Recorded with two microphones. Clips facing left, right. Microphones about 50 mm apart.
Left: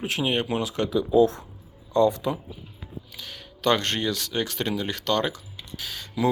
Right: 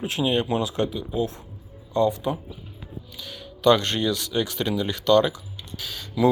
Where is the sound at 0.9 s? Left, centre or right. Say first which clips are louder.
Left 8 dB; left.